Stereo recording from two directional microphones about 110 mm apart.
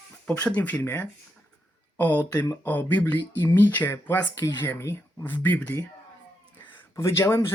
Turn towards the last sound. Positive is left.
turn(degrees=25)  # may be behind; listen again after turning